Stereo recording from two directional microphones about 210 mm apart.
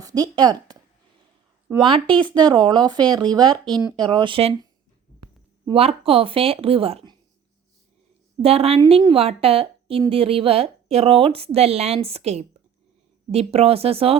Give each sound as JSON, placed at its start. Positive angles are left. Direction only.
{"t": 0.0, "sound": "speech", "side_deg": -20}
{"t": 1.8, "sound": "a woman's voice", "side_deg": -25}
{"t": 5.6, "sound": "a woman's voice", "side_deg": -30}
{"t": 8.4, "sound": "a woman's voice", "side_deg": -30}